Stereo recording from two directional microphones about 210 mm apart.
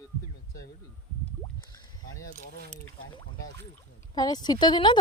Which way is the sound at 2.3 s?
40° left (ahead or behind).